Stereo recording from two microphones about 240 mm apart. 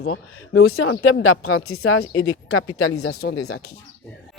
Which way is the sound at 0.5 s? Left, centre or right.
Left.